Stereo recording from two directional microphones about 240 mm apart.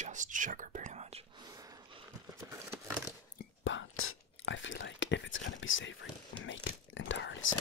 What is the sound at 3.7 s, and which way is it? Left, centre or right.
Whispering, left.